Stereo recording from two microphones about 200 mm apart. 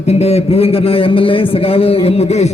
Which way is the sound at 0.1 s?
30° left (ahead or behind).